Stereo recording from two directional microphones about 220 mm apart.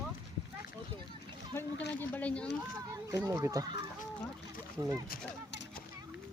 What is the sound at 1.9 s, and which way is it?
Speech, 10° left (ahead or behind).